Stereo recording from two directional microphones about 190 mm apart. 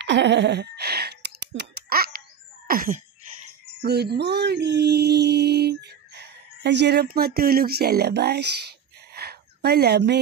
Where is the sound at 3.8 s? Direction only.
60° right (ahead or behind).